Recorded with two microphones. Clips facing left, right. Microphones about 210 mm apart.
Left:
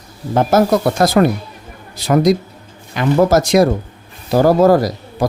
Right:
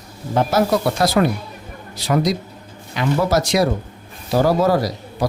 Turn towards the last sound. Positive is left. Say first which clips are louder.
# left 4 dB
turn(degrees=50)  # may be behind; listen again after turning